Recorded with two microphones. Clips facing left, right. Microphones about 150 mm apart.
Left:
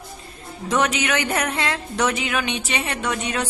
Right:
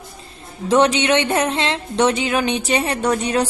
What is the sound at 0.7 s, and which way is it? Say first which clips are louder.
Speech: right 6 dB; 30° right (ahead or behind).